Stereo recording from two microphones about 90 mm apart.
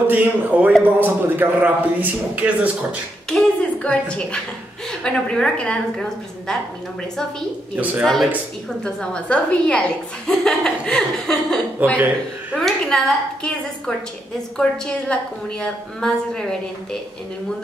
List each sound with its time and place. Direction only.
0.0 s a man's voice: 20° right (ahead or behind)
3.3 s a woman's voice: 5° left (ahead or behind)
7.7 s a man's voice: 15° right (ahead or behind)
8.0 s a woman's voice: centre (ahead or behind)
8.8 s a woman's voice: 10° left (ahead or behind)